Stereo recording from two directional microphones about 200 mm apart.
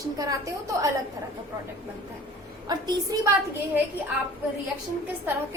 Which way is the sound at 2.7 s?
20° right (ahead or behind).